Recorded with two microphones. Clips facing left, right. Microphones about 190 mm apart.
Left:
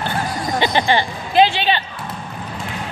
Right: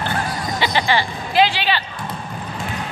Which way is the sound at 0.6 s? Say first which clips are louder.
Left 2 dB; 20° left (ahead or behind).